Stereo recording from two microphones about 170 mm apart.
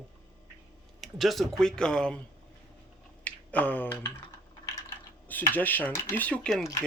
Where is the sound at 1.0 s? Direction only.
Centre (ahead or behind).